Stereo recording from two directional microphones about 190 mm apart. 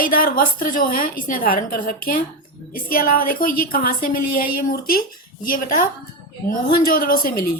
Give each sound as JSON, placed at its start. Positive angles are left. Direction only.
{"t": 0.0, "sound": "a woman's voice", "side_deg": 50}